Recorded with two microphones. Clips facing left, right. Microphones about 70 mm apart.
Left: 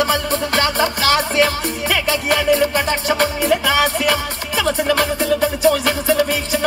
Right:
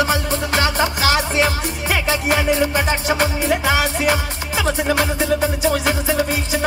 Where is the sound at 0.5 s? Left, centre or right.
Right.